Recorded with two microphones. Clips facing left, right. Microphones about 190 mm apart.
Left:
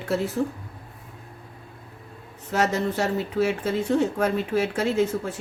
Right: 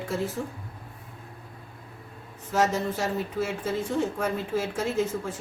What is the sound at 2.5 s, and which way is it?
Speech, 70° left (ahead or behind).